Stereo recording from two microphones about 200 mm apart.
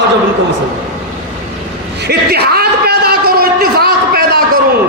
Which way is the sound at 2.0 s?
50° right (ahead or behind).